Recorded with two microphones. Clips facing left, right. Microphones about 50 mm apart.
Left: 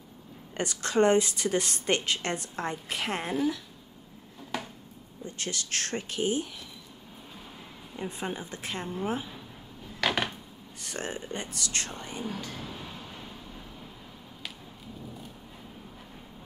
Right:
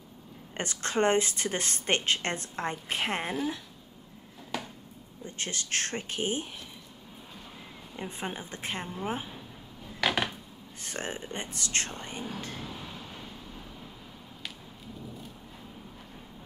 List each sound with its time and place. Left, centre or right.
0.6 s a woman's voice: right
4.5 s a sound: centre
5.2 s a woman's voice: right
8.2 s speech: right
9.9 s a sound: centre
10.8 s a woman's voice: right
12.6 s train: centre